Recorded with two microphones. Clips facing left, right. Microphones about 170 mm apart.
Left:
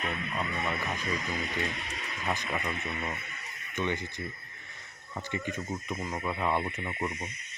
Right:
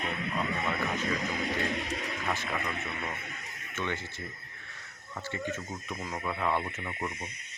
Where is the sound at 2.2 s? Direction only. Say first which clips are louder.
Left 4 dB; 15° left (ahead or behind).